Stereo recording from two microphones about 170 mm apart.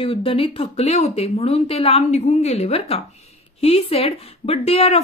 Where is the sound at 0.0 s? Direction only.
30° left (ahead or behind).